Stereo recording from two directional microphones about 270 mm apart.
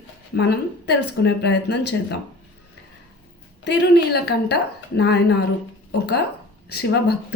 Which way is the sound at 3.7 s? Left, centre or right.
Left.